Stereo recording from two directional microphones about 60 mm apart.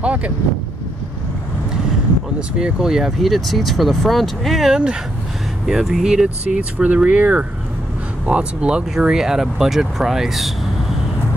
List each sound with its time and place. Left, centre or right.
0.0 s speech: right
2.6 s speech: centre